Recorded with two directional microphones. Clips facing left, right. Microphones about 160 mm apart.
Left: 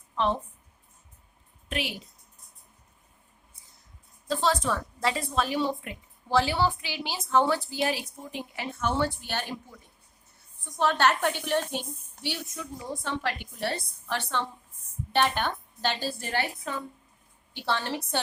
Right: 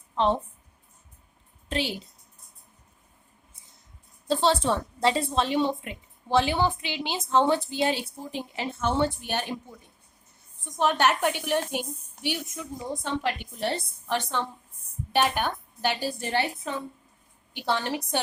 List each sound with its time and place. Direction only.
1.7 s a woman's voice: 30° right (ahead or behind)
4.3 s a woman's voice: 30° right (ahead or behind)
10.6 s a woman's voice: 20° right (ahead or behind)